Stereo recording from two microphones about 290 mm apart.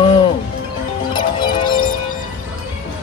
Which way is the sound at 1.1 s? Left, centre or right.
Centre.